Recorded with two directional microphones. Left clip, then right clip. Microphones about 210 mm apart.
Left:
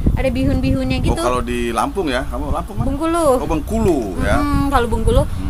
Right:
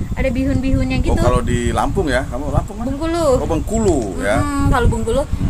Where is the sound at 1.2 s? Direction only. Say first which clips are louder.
Right 1 dB; 10° right (ahead or behind).